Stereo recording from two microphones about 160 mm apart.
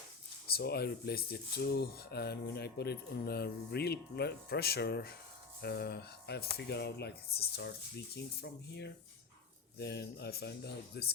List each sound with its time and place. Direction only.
0.5 s speech: 85° left